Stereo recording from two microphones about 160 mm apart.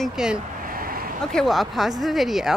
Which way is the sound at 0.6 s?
65° right (ahead or behind).